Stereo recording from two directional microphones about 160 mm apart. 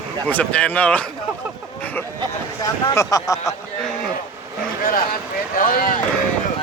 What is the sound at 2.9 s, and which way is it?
Speech, 20° left (ahead or behind).